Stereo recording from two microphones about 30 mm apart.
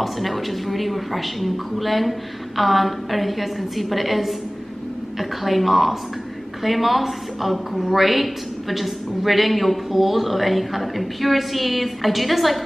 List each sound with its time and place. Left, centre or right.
0.0 s a woman's voice: centre
5.4 s a woman's voice: centre